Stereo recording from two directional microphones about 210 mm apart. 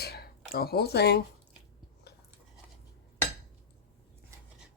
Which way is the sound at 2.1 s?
50° left (ahead or behind).